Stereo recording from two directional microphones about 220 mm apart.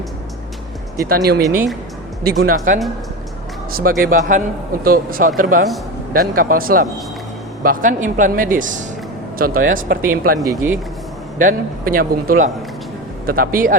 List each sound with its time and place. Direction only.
1.0 s speech: 45° right (ahead or behind)
1.4 s speech: 15° right (ahead or behind)
2.4 s a man's voice: 40° right (ahead or behind)
10.4 s speech: 15° right (ahead or behind)
11.3 s a man's voice: 40° right (ahead or behind)